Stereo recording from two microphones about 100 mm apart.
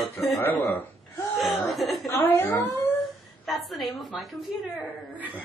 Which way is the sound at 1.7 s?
Centre (ahead or behind).